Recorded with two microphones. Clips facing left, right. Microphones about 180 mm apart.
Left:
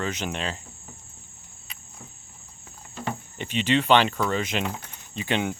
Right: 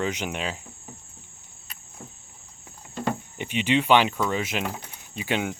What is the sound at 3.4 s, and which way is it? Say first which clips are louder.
Speech: even; 10° right (ahead or behind).